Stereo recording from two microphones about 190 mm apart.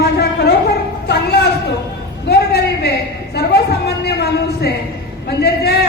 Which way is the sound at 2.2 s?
60° left (ahead or behind).